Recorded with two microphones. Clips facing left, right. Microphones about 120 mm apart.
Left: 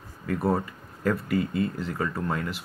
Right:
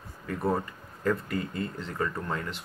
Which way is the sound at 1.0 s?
10° left (ahead or behind).